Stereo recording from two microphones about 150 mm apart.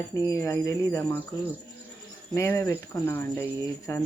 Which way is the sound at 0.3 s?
20° left (ahead or behind).